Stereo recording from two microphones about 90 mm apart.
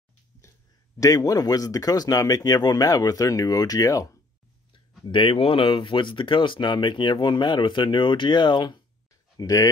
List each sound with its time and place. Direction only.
0.9 s speech: 40° left (ahead or behind)
5.1 s speech: 80° left; by 8.8 s 55° left (ahead or behind)
9.4 s speech: 40° left (ahead or behind)